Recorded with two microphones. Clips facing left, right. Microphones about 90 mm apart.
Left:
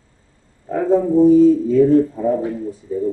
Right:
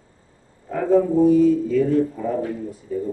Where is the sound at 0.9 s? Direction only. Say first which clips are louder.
Left 3 dB; 25° left (ahead or behind).